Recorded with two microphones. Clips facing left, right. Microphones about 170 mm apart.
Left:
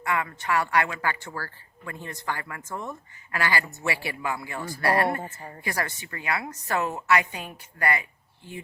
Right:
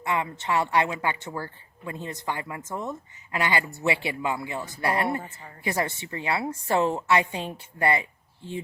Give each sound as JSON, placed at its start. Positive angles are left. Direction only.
{"t": 0.0, "sound": "speech", "side_deg": -25}
{"t": 5.2, "sound": "a woman's voice", "side_deg": 20}
{"t": 5.6, "sound": "speech", "side_deg": -25}